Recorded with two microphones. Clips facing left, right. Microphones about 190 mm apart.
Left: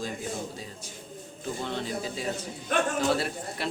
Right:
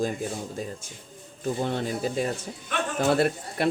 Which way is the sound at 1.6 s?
50° right (ahead or behind).